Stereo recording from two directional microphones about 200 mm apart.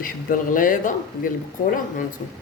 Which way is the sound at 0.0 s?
40° left (ahead or behind).